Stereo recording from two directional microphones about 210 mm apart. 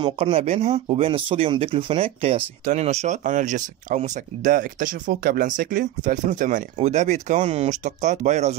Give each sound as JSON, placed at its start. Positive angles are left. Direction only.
{"t": 0.0, "sound": "speech", "side_deg": -30}